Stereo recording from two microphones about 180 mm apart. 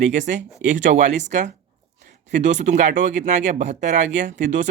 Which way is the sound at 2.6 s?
40° right (ahead or behind).